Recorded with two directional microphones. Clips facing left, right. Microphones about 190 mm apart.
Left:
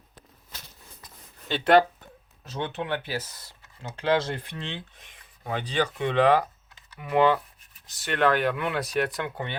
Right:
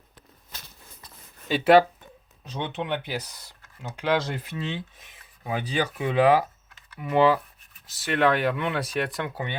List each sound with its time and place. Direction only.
1.5 s speech: 5° right (ahead or behind)
2.4 s speech: 15° right (ahead or behind)